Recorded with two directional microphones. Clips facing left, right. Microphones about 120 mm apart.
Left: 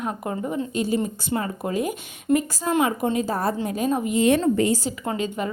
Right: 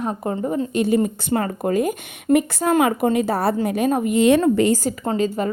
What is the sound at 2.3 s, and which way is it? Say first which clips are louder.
A woman's voice: right 4 dB; 70° right (ahead or behind).